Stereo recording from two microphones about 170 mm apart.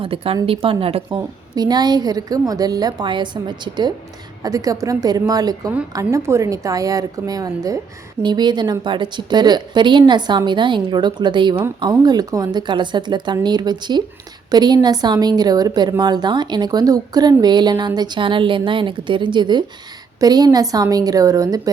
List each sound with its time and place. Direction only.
0.0 s speech: 35° right (ahead or behind)
1.5 s a woman's voice: 25° right (ahead or behind)